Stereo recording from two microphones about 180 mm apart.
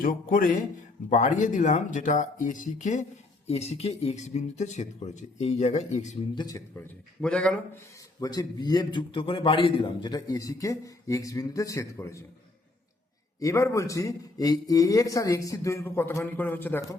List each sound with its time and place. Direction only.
0.0 s speech: 50° left (ahead or behind)
6.3 s a man's voice: 20° left (ahead or behind)
6.7 s a man's voice: 5° left (ahead or behind)
8.2 s a man's voice: 20° left (ahead or behind)
13.4 s a man's voice: 15° left (ahead or behind)